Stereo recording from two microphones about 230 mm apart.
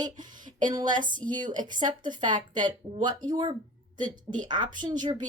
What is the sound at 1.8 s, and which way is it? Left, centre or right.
Speech, right.